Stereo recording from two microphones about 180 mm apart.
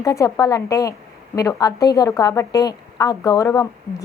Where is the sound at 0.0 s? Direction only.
15° left (ahead or behind).